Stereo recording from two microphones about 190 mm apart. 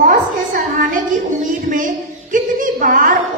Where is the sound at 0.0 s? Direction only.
45° right (ahead or behind).